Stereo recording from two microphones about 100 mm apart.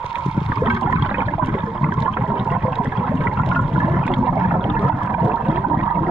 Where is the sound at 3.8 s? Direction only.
15° right (ahead or behind).